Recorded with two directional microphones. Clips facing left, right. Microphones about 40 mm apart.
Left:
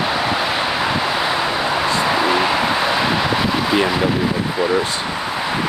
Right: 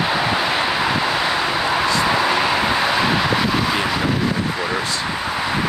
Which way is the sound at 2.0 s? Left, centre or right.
Centre.